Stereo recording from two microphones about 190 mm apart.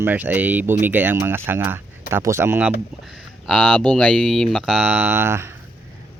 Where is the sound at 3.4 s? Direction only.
5° left (ahead or behind).